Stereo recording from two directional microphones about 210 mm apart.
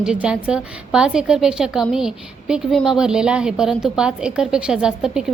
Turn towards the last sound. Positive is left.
turn(degrees=-5)  # may be behind; listen again after turning